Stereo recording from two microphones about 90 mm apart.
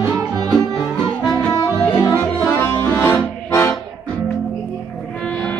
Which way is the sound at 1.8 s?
25° left (ahead or behind).